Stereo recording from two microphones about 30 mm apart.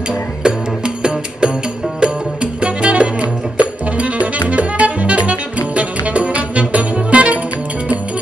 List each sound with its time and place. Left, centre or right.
0.4 s music: right